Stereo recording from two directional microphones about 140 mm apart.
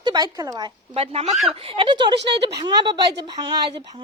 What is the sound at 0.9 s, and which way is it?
Speech, 45° right (ahead or behind).